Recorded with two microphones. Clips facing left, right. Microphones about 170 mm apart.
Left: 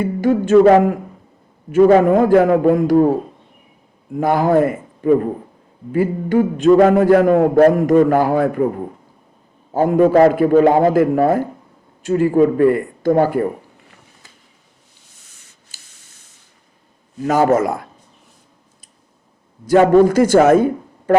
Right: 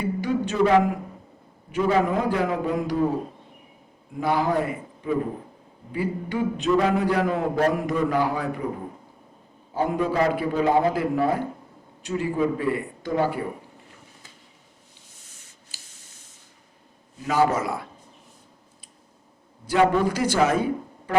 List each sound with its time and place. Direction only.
0.0 s a man's voice: 50° left (ahead or behind)
4.2 s a man's voice: 45° left (ahead or behind)
9.7 s a man's voice: 50° left (ahead or behind)
15.7 s spray: 45° left (ahead or behind)
17.2 s a man's voice: 45° left (ahead or behind)
19.6 s a man's voice: 45° left (ahead or behind)